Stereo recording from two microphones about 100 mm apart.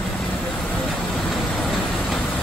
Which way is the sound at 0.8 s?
Centre (ahead or behind).